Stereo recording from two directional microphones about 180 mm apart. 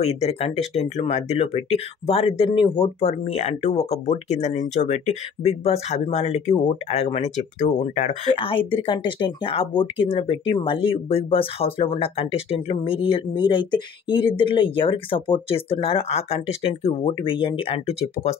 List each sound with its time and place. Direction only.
0.0 s speech: 35° left (ahead or behind)